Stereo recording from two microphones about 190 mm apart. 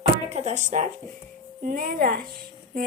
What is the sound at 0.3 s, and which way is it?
A woman's voice, 35° right (ahead or behind).